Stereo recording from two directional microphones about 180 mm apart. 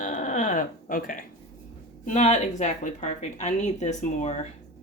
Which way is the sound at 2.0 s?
40° left (ahead or behind).